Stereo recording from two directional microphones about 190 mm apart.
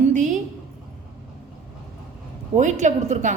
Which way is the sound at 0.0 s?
40° right (ahead or behind).